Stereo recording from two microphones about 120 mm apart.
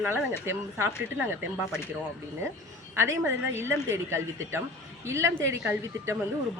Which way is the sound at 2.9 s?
20° right (ahead or behind).